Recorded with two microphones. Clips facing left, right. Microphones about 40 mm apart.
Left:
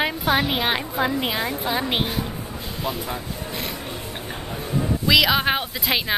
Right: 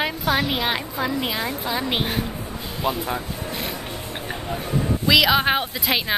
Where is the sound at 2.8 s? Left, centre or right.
Right.